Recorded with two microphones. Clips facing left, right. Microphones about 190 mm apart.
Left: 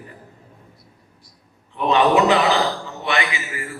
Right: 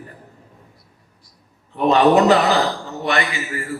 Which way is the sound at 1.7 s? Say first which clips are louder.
Right 3 dB; 40° right (ahead or behind).